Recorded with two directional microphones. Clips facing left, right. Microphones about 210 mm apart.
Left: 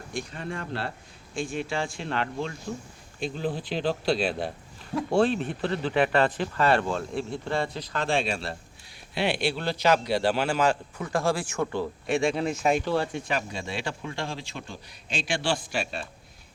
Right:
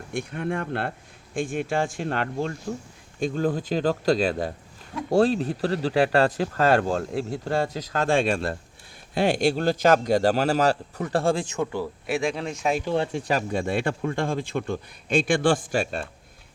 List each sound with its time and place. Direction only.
0.1 s a man's voice: 60° right (ahead or behind); by 12.8 s centre (ahead or behind)
12.8 s speech: 20° right (ahead or behind)
13.5 s a man's voice: 55° right (ahead or behind)